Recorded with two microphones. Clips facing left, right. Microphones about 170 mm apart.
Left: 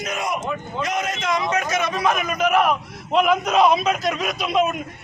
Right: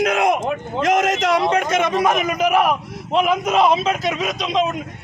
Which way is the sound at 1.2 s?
65° right (ahead or behind).